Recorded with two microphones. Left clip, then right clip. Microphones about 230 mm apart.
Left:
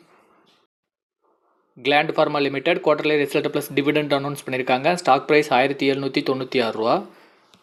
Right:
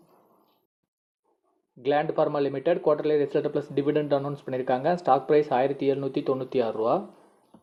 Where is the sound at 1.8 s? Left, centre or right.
Left.